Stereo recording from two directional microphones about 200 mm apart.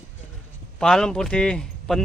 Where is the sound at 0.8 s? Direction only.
5° left (ahead or behind).